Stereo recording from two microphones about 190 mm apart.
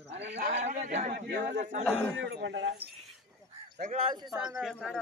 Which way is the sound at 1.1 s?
55° right (ahead or behind).